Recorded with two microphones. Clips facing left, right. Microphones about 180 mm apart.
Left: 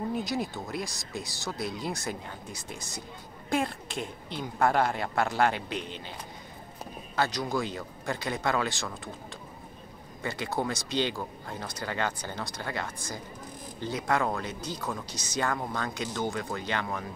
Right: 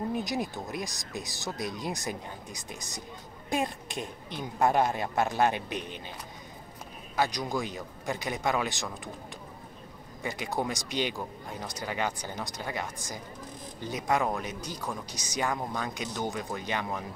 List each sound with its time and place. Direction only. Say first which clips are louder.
0.1 s speech: even; 20° right (ahead or behind)
7.2 s speech: left 1 dB; 15° right (ahead or behind)
10.2 s speech: left 1 dB; 15° right (ahead or behind)